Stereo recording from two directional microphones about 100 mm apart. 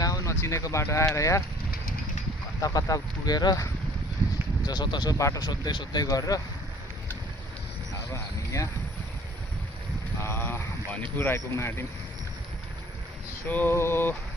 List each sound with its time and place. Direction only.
0.0 s speech: 35° left (ahead or behind)
2.6 s speech: 35° left (ahead or behind)
4.6 s speech: 45° left (ahead or behind)
5.1 s speech: 35° left (ahead or behind)
6.1 s speech: 35° left (ahead or behind)
8.1 s speech: 30° left (ahead or behind)
10.2 s a sound: 25° left (ahead or behind)
13.5 s a sound: 20° left (ahead or behind)